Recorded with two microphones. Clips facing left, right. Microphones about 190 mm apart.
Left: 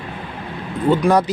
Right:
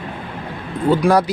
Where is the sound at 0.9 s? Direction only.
10° right (ahead or behind).